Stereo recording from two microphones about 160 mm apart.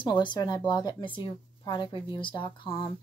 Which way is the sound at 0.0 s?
30° left (ahead or behind).